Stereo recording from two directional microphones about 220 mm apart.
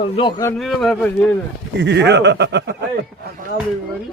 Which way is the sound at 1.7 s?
50° right (ahead or behind).